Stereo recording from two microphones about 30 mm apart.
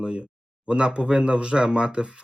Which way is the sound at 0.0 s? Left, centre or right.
Right.